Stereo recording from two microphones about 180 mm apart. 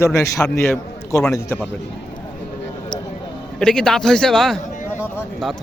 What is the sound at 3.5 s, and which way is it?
Speech, 5° left (ahead or behind).